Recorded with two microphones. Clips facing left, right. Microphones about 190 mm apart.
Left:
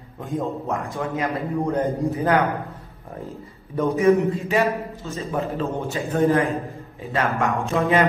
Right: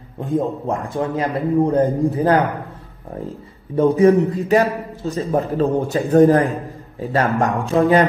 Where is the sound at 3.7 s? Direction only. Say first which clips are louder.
Right 5 dB; 35° right (ahead or behind).